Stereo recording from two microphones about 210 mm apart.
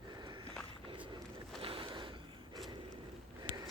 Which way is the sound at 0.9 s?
25° right (ahead or behind).